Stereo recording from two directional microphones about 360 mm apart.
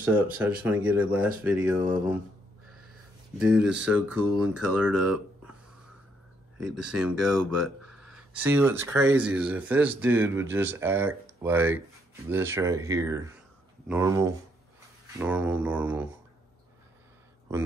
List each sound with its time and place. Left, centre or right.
0.4 s speech: centre
3.3 s speech: centre
6.6 s speech: right
6.9 s speech: centre